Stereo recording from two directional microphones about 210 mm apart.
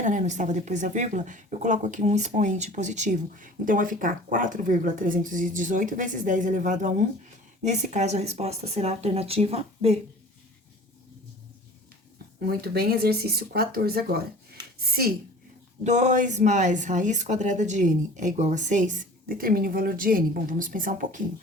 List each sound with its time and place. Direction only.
0.0 s speech: 35° right (ahead or behind)
12.5 s speech: 50° right (ahead or behind)
15.8 s speech: 35° right (ahead or behind)